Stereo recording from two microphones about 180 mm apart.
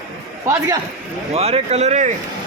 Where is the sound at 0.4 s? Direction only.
15° right (ahead or behind).